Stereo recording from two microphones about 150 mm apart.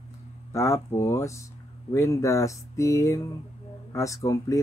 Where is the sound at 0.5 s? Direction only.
20° left (ahead or behind).